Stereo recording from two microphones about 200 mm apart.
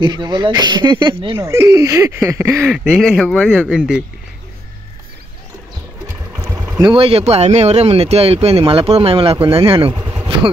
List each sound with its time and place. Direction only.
0.0 s speech: 20° right (ahead or behind)
2.6 s speech: centre (ahead or behind)
6.5 s vehicle: 10° right (ahead or behind)
6.9 s speech: 30° right (ahead or behind)